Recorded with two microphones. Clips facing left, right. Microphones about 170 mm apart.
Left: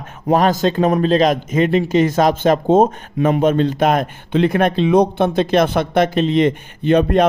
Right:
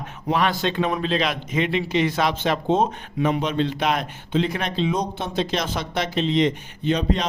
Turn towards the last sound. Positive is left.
turn(degrees=55)  # may be behind; listen again after turning